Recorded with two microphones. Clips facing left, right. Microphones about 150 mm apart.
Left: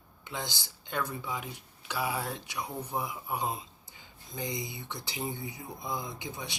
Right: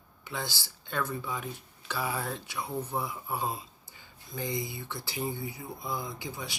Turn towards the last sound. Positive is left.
turn(degrees=20)  # may be behind; listen again after turning